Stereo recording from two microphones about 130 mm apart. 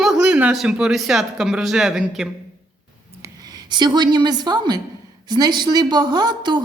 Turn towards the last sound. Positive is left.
turn(degrees=-35)  # may be behind; listen again after turning